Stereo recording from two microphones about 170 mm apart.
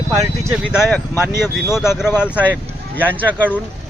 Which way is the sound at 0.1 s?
20° right (ahead or behind).